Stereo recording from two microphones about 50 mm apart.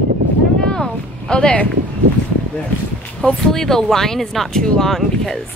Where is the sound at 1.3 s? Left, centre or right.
Left.